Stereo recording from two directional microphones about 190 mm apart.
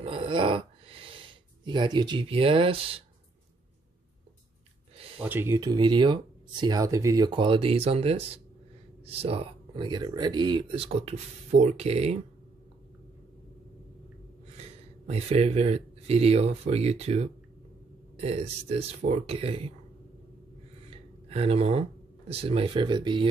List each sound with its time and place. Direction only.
0.0 s a sound: 30° right (ahead or behind)
5.2 s speech: 10° right (ahead or behind); by 12.2 s 35° right (ahead or behind)
14.6 s speech: 35° right (ahead or behind)
21.3 s speech: 30° right (ahead or behind)